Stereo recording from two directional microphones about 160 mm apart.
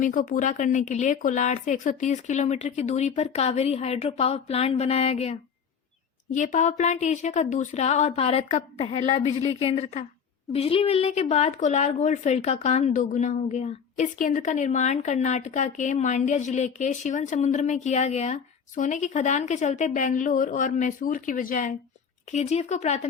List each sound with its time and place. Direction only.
0.0 s speech: 55° left (ahead or behind); by 5.4 s 40° left (ahead or behind)
6.3 s speech: 50° left (ahead or behind)
22.3 s speech: 45° left (ahead or behind)